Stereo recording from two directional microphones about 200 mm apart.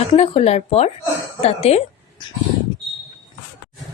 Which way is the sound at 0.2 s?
30° left (ahead or behind).